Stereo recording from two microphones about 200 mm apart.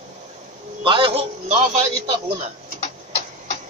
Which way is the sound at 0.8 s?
25° right (ahead or behind).